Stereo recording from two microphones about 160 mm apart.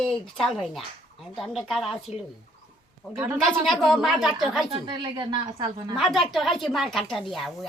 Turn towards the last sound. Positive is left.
turn(degrees=0)  # may be behind; listen again after turning